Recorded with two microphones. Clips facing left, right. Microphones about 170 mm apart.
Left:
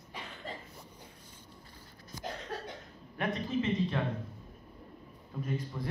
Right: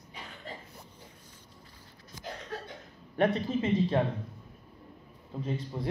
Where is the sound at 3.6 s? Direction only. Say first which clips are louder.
Right 4 dB; 35° right (ahead or behind).